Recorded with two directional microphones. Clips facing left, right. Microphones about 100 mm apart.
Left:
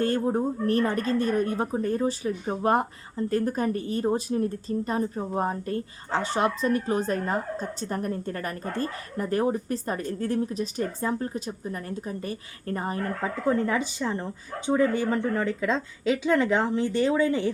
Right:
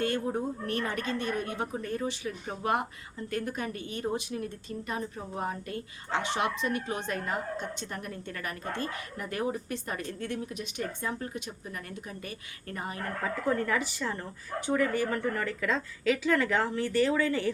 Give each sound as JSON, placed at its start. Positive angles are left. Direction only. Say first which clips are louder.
{"t": 0.0, "sound": "speech", "louder": "left 5 dB", "side_deg": 35}
{"t": 13.2, "sound": "speech", "louder": "left 4 dB", "side_deg": 20}